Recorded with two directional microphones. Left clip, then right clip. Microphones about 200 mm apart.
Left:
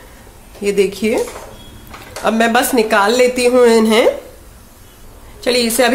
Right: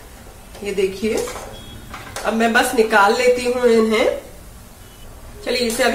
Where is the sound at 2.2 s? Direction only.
55° left (ahead or behind).